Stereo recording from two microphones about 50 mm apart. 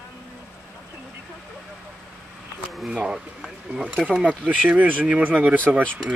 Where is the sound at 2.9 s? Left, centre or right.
Centre.